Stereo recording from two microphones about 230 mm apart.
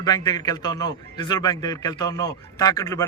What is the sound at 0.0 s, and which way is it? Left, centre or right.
A man's voice, centre.